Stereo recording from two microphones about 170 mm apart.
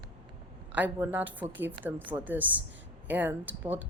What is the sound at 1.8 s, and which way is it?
Speech, 25° right (ahead or behind).